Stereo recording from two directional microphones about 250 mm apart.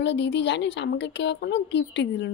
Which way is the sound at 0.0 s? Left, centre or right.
Left.